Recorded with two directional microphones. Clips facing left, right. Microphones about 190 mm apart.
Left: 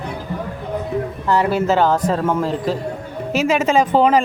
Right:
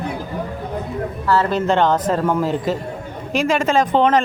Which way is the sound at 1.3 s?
10° left (ahead or behind).